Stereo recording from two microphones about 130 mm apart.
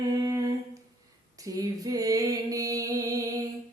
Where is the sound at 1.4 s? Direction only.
25° right (ahead or behind).